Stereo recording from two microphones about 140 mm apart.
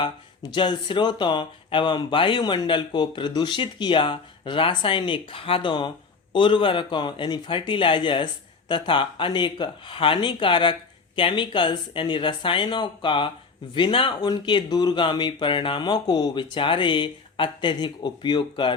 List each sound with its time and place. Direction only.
0.5 s a man's voice: 35° left (ahead or behind)